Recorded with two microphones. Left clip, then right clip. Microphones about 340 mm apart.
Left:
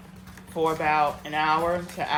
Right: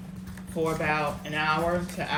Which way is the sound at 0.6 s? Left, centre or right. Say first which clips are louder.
Left 4 dB; centre.